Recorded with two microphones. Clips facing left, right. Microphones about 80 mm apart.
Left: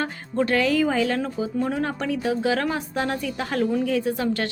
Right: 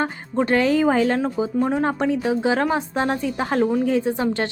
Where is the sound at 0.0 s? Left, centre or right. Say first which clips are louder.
Right 2 dB; right.